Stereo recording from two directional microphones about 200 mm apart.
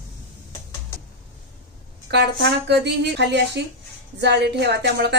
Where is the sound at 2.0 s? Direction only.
60° right (ahead or behind).